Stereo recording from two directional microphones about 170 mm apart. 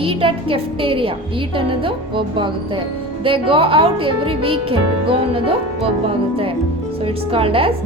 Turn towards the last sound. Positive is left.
turn(degrees=-35)  # may be behind; listen again after turning